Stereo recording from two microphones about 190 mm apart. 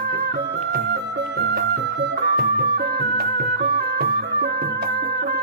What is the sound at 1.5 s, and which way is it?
Music, 60° right (ahead or behind).